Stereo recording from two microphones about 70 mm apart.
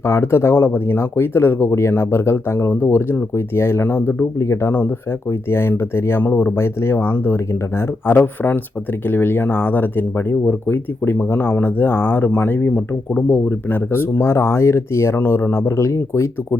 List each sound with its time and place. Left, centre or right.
0.0 s speech: left
12.7 s speech: centre; by 16.6 s left